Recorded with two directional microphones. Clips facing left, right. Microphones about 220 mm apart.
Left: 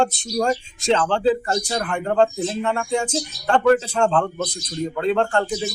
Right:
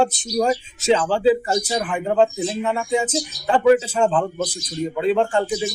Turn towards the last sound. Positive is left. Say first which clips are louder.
# right 1 dB
turn(degrees=-5)  # may be behind; listen again after turning